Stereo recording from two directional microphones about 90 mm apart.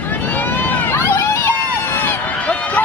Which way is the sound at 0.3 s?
20° left (ahead or behind).